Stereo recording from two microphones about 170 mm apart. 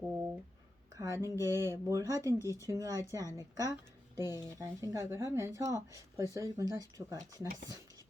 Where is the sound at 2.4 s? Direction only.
20° left (ahead or behind).